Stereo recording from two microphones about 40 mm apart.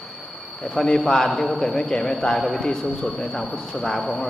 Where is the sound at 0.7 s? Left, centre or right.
Centre.